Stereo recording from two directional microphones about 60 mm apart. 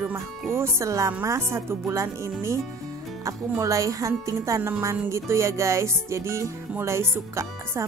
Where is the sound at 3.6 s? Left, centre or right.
Right.